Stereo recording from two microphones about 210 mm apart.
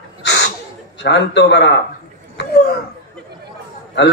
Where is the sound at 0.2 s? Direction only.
55° left (ahead or behind).